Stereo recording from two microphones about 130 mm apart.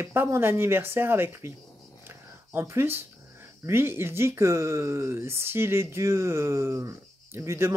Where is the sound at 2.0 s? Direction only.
20° right (ahead or behind).